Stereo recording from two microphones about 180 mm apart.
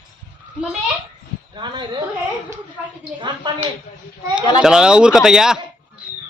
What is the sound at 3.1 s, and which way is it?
Speech, 25° right (ahead or behind).